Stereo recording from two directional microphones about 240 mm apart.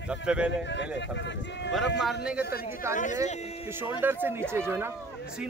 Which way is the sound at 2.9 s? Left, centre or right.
Left.